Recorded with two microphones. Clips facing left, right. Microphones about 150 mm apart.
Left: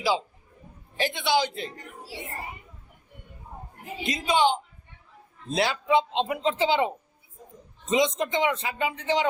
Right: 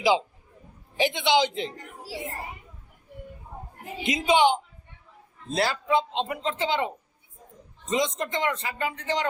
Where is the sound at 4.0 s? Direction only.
20° right (ahead or behind).